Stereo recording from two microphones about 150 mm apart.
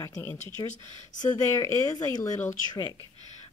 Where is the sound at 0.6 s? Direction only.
25° left (ahead or behind).